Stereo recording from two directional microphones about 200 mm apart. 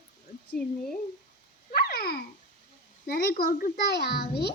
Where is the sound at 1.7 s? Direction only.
50° left (ahead or behind).